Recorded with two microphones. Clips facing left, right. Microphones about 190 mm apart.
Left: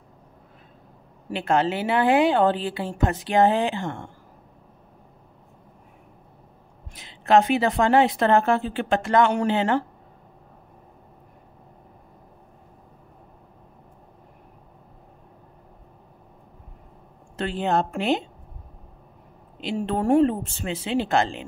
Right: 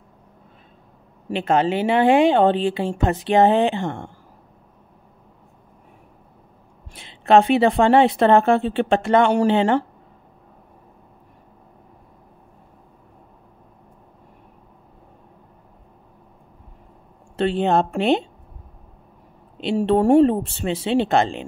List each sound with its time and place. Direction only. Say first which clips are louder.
1.3 s a woman's voice: right 3 dB; 20° right (ahead or behind)
6.9 s a woman's voice: right 3 dB; 25° right (ahead or behind)
17.4 s a woman's voice: right 5 dB; 25° right (ahead or behind)
19.6 s a woman's voice: right 7 dB; 30° right (ahead or behind)